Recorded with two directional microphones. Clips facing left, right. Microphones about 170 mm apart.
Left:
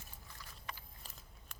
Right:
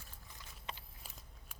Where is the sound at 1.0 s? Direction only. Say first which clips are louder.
Right 1 dB; 5° right (ahead or behind).